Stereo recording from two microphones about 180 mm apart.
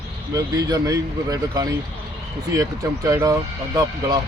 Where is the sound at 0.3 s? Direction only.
20° right (ahead or behind).